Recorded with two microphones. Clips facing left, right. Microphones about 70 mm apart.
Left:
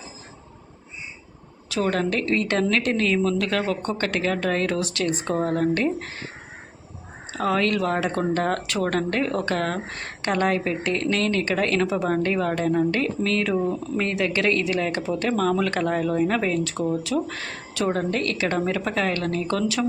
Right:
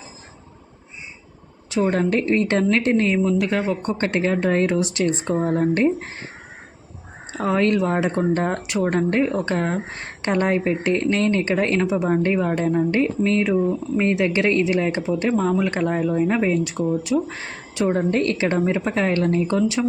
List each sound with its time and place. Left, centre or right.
1.7 s speech: right
7.3 s speech: right